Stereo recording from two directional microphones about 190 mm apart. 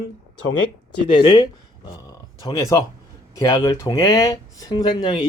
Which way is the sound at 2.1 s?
20° left (ahead or behind).